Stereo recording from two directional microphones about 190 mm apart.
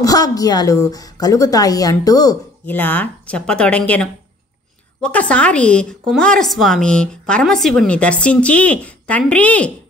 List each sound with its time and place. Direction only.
0.0 s a woman's voice: 20° left (ahead or behind)
2.6 s a woman's voice: 10° left (ahead or behind)